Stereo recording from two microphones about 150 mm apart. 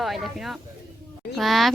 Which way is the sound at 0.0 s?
Centre (ahead or behind).